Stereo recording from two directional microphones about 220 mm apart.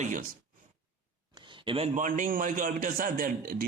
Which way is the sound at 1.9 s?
35° right (ahead or behind).